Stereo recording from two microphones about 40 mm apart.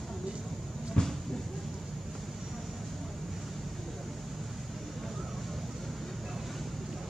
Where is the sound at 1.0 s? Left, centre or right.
Left.